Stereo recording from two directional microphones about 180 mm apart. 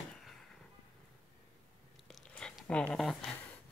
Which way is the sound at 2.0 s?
5° left (ahead or behind).